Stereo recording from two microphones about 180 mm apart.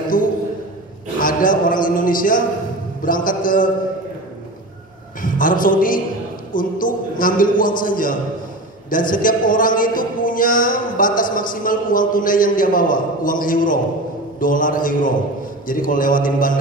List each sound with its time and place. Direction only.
0.1 s a sound: 50° left (ahead or behind)
3.0 s a man's voice: 50° left (ahead or behind)
5.2 s a man's voice: 50° left (ahead or behind)